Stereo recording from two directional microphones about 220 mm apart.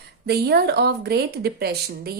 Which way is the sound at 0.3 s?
45° right (ahead or behind).